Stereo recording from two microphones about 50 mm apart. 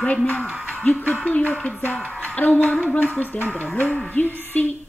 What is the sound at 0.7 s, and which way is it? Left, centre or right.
Hoot, left.